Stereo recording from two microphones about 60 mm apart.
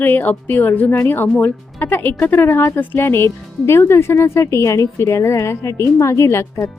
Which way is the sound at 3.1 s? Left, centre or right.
Left.